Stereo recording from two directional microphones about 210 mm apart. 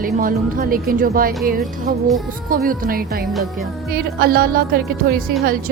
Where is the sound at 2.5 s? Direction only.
40° right (ahead or behind).